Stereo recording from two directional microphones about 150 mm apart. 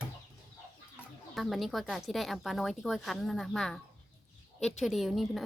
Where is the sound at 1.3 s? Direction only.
Centre (ahead or behind).